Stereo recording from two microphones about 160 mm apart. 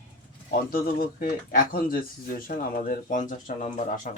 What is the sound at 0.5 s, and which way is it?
Speech, 65° left (ahead or behind).